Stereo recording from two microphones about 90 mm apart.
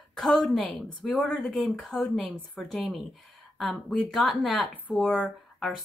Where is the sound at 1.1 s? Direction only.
15° left (ahead or behind).